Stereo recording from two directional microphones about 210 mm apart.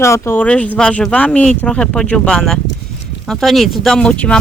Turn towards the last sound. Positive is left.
turn(degrees=5)  # may be behind; listen again after turning